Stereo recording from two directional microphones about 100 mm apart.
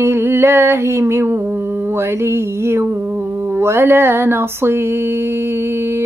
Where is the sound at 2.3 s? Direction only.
25° right (ahead or behind).